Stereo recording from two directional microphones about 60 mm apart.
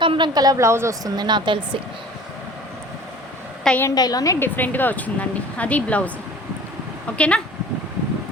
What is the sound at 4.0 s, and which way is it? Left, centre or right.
Speech, left.